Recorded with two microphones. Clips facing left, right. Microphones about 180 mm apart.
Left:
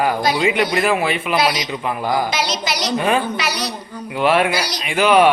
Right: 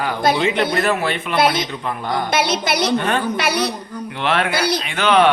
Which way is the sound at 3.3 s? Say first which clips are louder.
Right 4 dB; 55° right (ahead or behind).